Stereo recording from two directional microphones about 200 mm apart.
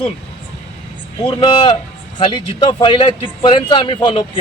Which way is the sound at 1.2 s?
20° left (ahead or behind).